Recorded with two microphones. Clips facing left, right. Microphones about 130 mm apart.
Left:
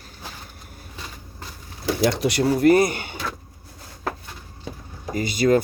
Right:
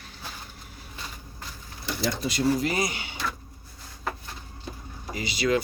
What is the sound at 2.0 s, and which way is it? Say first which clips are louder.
Speech: left 7 dB; 70° left (ahead or behind).